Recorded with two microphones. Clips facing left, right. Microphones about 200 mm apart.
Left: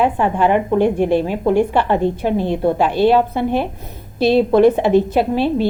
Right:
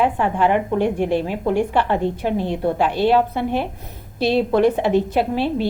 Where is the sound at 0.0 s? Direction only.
30° left (ahead or behind).